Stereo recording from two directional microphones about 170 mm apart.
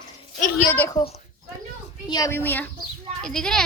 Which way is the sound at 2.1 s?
25° left (ahead or behind).